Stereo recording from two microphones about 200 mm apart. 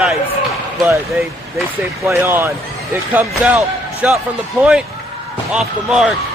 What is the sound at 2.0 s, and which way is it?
Speech, 10° right (ahead or behind).